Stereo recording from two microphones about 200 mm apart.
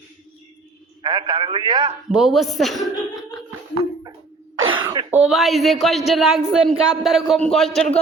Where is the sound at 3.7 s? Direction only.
20° right (ahead or behind).